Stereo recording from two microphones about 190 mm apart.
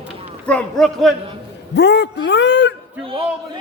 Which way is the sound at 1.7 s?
60° left (ahead or behind).